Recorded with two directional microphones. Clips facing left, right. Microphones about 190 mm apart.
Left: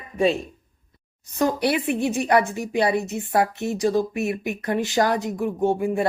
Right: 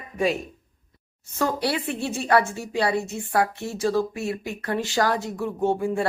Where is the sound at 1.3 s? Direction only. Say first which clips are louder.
Left 3 dB; 15° left (ahead or behind).